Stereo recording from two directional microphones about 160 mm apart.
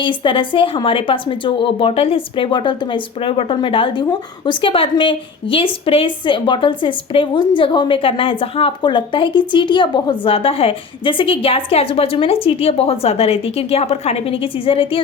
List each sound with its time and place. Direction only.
0.0 s speech: 30° left (ahead or behind)